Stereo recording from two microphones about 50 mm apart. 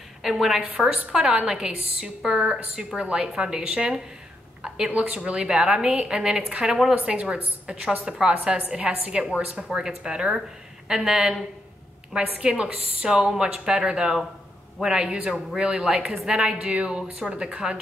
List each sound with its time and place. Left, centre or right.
0.2 s a woman's voice: centre